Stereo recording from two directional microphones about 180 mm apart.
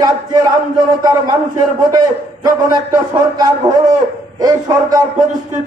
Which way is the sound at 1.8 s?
20° right (ahead or behind).